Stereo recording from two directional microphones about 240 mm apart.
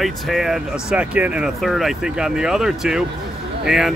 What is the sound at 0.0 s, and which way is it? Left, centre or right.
Speech, centre.